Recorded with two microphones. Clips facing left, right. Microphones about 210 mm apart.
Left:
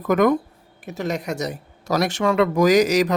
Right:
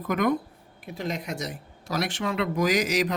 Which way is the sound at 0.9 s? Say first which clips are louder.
Left 6 dB; 75° left (ahead or behind).